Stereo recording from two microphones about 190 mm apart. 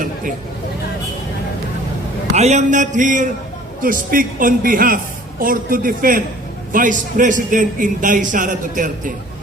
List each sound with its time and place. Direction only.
2.3 s a man's voice: 35° right (ahead or behind)